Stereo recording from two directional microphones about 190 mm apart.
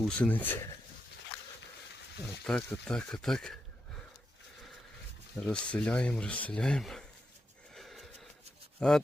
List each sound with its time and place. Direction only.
0.0 s speech: 10° left (ahead or behind)
2.4 s speech: 5° left (ahead or behind)
5.4 s speech: 5° left (ahead or behind)
7.8 s wheeze: centre (ahead or behind)
8.8 s speech: 5° left (ahead or behind)